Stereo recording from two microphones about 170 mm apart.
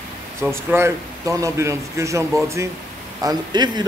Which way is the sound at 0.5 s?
15° right (ahead or behind).